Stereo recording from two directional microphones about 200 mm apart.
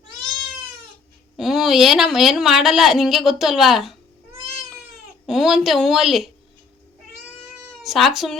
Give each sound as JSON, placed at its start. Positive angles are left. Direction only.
{"t": 1.4, "sound": "a woman's voice", "side_deg": 0}
{"t": 5.2, "sound": "a woman's voice", "side_deg": 0}
{"t": 7.8, "sound": "speech", "side_deg": 0}